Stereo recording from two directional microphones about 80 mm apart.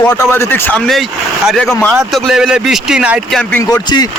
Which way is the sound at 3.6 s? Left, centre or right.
Left.